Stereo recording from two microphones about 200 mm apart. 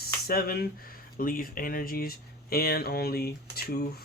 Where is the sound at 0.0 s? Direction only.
50° left (ahead or behind).